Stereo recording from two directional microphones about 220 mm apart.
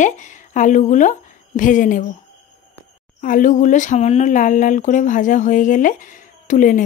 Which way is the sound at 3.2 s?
35° left (ahead or behind).